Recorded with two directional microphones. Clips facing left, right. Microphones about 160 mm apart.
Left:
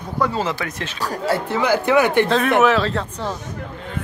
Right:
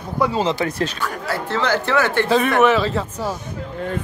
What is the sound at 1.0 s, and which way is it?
Speech, 35° left (ahead or behind).